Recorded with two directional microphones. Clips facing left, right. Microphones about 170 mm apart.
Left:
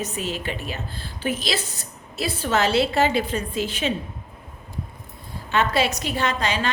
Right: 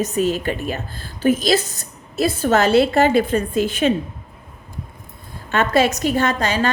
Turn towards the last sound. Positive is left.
turn(degrees=-45)  # may be behind; listen again after turning